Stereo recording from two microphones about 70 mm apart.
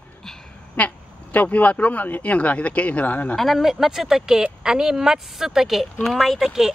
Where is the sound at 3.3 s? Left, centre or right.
Centre.